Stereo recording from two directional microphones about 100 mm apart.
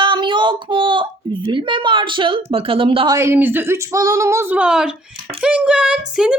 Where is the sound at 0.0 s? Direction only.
55° right (ahead or behind).